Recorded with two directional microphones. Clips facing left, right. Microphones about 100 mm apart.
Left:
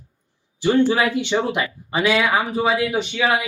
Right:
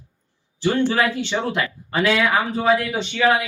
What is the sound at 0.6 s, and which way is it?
Speech, 10° left (ahead or behind).